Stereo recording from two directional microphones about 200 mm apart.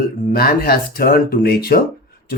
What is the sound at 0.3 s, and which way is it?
Speech, 50° left (ahead or behind).